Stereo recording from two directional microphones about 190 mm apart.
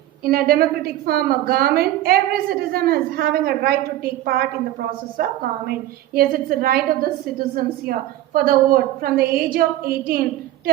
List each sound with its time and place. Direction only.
0.3 s a woman's voice: 50° right (ahead or behind)